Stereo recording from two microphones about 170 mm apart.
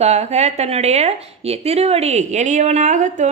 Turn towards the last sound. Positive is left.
turn(degrees=-45)  # may be behind; listen again after turning